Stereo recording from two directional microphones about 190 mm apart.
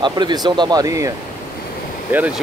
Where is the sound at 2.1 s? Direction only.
10° right (ahead or behind).